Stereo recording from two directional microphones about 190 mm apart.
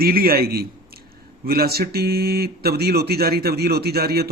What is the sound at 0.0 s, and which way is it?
A man's voice, 55° right (ahead or behind).